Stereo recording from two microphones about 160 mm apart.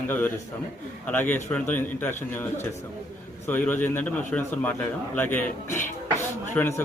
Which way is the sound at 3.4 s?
10° left (ahead or behind).